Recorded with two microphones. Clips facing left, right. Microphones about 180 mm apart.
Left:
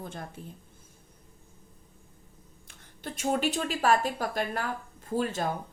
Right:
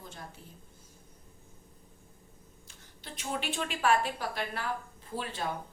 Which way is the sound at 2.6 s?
50° left (ahead or behind).